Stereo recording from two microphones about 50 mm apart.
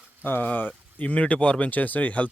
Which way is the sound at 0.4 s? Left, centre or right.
Left.